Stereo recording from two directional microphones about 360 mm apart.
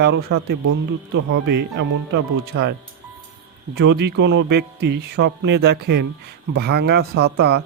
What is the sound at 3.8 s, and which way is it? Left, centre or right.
Speech, right.